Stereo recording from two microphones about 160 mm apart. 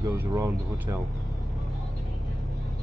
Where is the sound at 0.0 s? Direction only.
20° right (ahead or behind).